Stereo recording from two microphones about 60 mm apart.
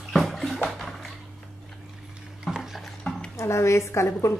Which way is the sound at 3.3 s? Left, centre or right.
Left.